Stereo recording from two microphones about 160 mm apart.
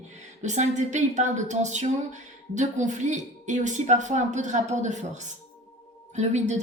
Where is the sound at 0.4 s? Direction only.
50° right (ahead or behind).